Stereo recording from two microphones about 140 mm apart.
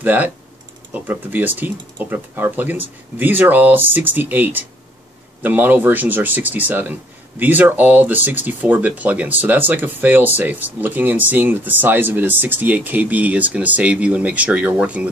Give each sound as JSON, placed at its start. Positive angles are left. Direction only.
{"t": 0.0, "sound": "speech", "side_deg": -10}